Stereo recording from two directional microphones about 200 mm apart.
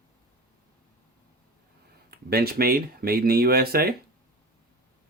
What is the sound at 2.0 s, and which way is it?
Speech, 50° right (ahead or behind).